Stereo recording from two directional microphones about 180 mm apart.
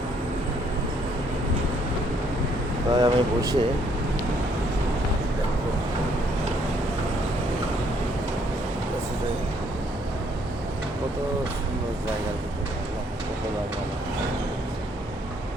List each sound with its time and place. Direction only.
2.9 s speech: 20° right (ahead or behind)